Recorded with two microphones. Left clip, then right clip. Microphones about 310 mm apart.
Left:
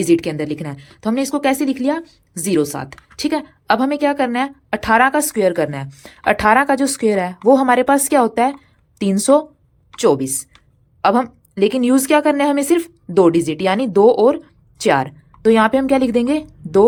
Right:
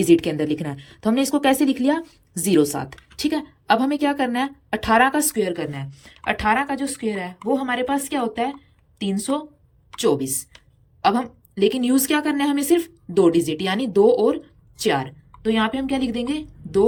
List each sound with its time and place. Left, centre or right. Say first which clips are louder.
0.0 s a woman's voice: left 1 dB; centre